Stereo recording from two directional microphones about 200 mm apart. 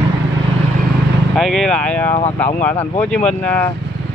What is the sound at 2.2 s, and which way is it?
Speech, 35° left (ahead or behind).